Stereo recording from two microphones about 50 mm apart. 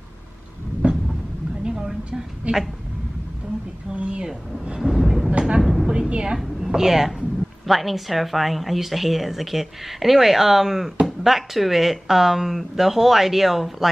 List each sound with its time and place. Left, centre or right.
1.6 s a sound: centre
2.4 s a woman's voice: right
3.9 s a woman's voice: right
4.6 s thunder: centre
5.6 s speech: centre
5.9 s a woman's voice: right
6.3 s a woman's voice: centre